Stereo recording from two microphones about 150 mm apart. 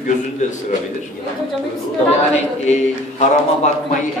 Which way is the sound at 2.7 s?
50° left (ahead or behind).